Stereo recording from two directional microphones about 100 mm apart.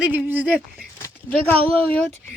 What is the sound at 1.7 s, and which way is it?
Speech, 15° left (ahead or behind).